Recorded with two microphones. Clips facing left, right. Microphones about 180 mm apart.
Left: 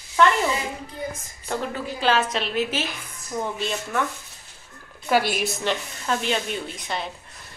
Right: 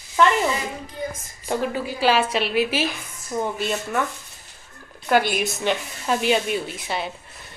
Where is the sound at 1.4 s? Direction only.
10° right (ahead or behind).